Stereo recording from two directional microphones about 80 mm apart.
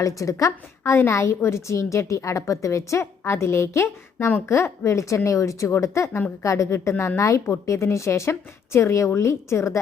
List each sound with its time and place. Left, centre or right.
0.2 s a woman's voice: left